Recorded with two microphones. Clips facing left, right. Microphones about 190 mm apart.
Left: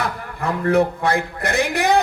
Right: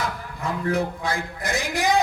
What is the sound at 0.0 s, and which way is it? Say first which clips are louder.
A man's voice: left 4 dB; 60° left (ahead or behind).